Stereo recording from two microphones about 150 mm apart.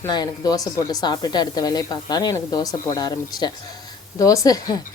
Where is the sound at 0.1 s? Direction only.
25° left (ahead or behind).